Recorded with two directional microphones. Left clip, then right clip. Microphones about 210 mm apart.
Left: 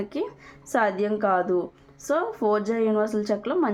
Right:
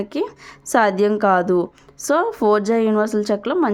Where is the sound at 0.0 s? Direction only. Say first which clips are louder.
Right 6 dB; 35° right (ahead or behind).